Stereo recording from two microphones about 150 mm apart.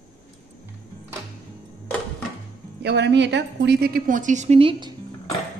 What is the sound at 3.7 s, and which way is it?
A woman's voice, 90° right.